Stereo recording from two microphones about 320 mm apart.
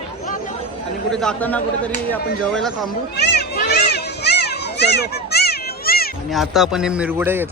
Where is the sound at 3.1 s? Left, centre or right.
Left.